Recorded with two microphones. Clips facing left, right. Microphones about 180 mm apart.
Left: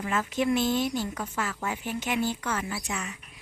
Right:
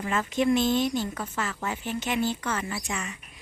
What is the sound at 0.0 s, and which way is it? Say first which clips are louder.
Speech: right 2 dB; 5° left (ahead or behind).